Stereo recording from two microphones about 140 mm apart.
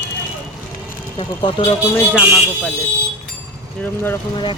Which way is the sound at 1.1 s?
30° left (ahead or behind).